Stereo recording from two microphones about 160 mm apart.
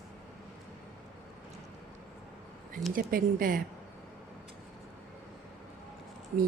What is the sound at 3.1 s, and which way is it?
Speech, 60° right (ahead or behind).